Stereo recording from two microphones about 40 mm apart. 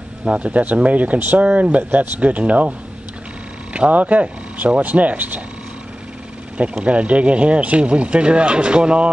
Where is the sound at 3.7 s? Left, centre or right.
Right.